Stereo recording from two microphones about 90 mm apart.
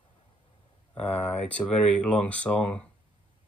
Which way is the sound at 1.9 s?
15° left (ahead or behind).